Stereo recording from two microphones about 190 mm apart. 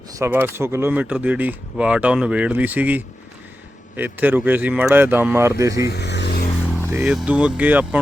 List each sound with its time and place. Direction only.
0.1 s speech: 15° right (ahead or behind)
5.9 s vehicle: 65° left (ahead or behind)
6.7 s vehicle: 10° left (ahead or behind)
6.9 s speech: 5° right (ahead or behind)